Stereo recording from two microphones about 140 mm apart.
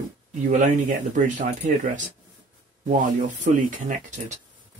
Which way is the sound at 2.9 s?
65° right (ahead or behind).